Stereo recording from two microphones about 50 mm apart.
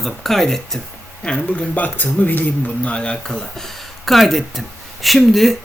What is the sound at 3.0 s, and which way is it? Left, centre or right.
Speech, centre.